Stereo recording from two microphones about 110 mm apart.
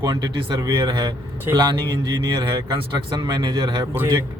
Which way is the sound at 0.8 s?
45° right (ahead or behind).